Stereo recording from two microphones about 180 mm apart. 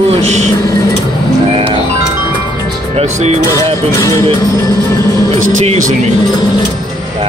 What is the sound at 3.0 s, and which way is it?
Speech, 40° right (ahead or behind).